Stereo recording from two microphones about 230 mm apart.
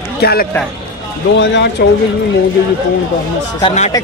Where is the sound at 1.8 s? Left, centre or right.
Left.